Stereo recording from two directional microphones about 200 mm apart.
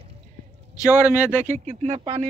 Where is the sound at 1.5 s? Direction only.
35° right (ahead or behind).